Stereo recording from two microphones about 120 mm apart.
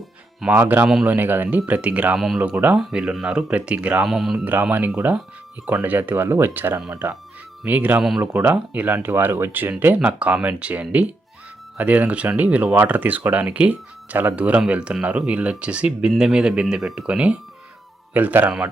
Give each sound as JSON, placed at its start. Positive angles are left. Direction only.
{"t": 0.5, "sound": "speech", "side_deg": -15}
{"t": 2.1, "sound": "speech", "side_deg": 0}
{"t": 2.4, "sound": "speech", "side_deg": -15}
{"t": 4.4, "sound": "speech", "side_deg": -15}